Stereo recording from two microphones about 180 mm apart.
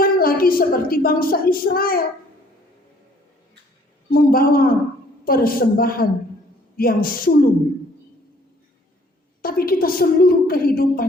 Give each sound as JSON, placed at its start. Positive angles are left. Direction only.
{"t": 0.0, "sound": "a woman's voice", "side_deg": 55}
{"t": 4.1, "sound": "a woman's voice", "side_deg": 55}
{"t": 9.4, "sound": "a woman's voice", "side_deg": 55}